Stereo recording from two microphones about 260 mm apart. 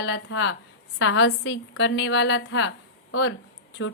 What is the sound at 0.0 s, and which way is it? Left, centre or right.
A woman's voice, left.